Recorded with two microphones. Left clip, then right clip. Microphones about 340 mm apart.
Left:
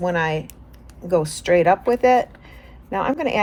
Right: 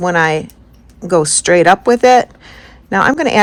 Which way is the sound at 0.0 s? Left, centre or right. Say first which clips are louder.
Right 9 dB; right.